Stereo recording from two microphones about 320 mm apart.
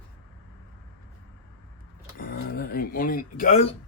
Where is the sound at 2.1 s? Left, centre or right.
Left.